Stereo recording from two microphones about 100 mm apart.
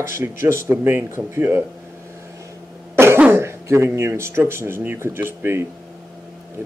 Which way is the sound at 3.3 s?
25° right (ahead or behind).